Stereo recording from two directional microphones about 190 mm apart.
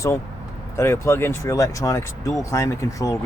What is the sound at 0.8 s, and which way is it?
Speech, 15° left (ahead or behind).